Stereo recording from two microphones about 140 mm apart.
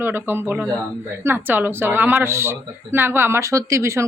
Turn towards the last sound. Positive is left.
turn(degrees=-20)  # may be behind; listen again after turning